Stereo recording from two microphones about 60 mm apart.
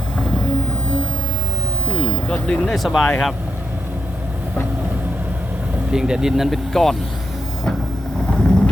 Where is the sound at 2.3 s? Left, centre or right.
Centre.